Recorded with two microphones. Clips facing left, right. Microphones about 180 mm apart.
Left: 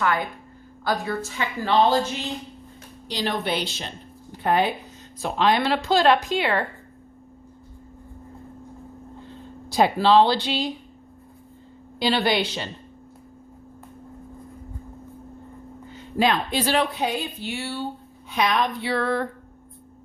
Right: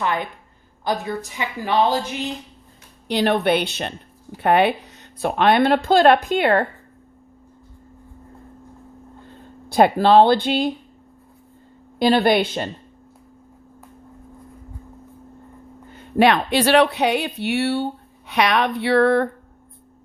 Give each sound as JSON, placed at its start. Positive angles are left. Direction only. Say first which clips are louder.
{"t": 0.0, "sound": "a woman's voice", "louder": "even", "side_deg": -20}
{"t": 3.1, "sound": "speech", "louder": "right 8 dB", "side_deg": -60}
{"t": 9.6, "sound": "speech", "louder": "right 4 dB", "side_deg": -55}
{"t": 11.9, "sound": "speech", "louder": "right 6 dB", "side_deg": -50}
{"t": 15.9, "sound": "speech", "louder": "right 6 dB", "side_deg": -65}